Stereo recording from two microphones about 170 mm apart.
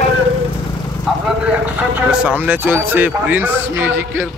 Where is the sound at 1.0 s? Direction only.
5° right (ahead or behind).